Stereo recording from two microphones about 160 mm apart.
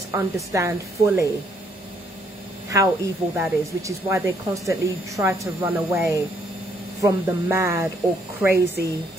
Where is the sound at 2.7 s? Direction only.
20° right (ahead or behind).